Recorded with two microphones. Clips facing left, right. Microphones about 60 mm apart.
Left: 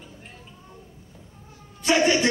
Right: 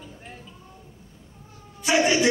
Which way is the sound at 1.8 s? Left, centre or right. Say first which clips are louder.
Left 1 dB; centre.